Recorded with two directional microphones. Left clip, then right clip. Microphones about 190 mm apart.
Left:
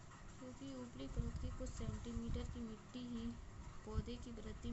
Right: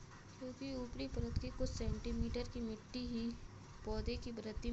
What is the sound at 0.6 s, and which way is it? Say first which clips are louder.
Speech: right 7 dB; 25° right (ahead or behind).